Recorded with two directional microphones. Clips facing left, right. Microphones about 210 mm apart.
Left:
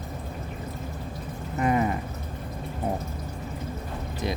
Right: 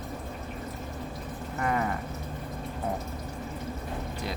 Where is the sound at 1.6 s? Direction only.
20° left (ahead or behind).